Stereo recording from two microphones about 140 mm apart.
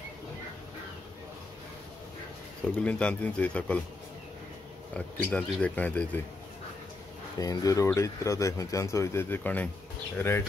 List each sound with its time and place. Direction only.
2.6 s speech: 10° left (ahead or behind)
4.9 s speech: 10° left (ahead or behind)
7.3 s speech: 25° left (ahead or behind)